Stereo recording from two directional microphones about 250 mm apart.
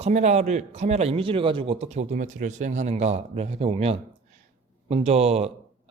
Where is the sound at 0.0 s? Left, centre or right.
Right.